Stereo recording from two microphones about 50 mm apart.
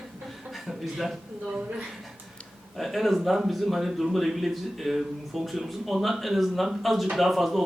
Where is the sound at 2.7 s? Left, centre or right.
Centre.